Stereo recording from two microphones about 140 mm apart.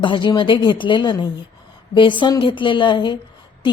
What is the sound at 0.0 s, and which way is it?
A woman's voice, 35° left (ahead or behind).